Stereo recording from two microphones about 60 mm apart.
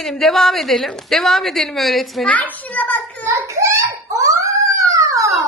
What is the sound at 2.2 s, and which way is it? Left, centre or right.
Speech, left.